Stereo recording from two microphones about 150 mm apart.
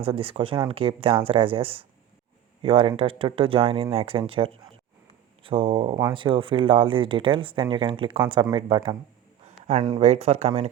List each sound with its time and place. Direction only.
0.0 s speech: 35° right (ahead or behind)
10.0 s speech: 45° right (ahead or behind)